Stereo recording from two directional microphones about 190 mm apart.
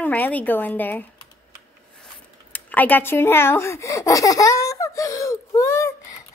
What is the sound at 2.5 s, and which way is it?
Speech, 10° left (ahead or behind).